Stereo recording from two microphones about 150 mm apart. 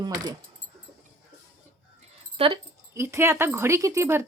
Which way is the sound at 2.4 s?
40° right (ahead or behind).